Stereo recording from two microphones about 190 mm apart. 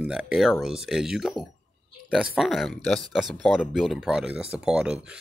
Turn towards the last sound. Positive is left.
turn(degrees=-5)  # may be behind; listen again after turning